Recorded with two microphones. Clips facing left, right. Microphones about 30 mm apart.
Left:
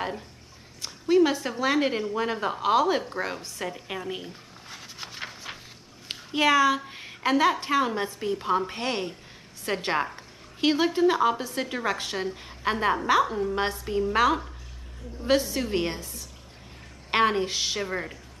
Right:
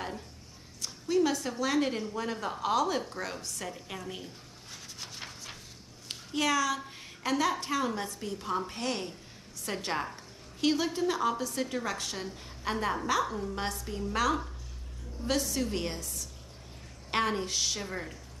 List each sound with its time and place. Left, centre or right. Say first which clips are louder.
0.7 s a woman's voice: left 7 dB; left